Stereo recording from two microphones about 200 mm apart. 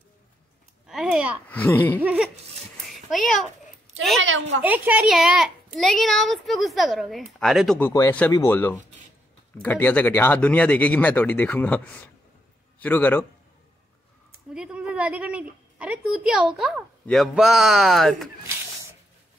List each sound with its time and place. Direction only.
0.8 s a sound: centre (ahead or behind)
1.5 s speech: 10° left (ahead or behind)
2.8 s a sound: centre (ahead or behind)
4.2 s a woman's voice: 75° right (ahead or behind)
4.6 s a woman's voice: 10° right (ahead or behind); by 13.2 s 10° left (ahead or behind)
14.5 s a woman's voice: 5° right (ahead or behind)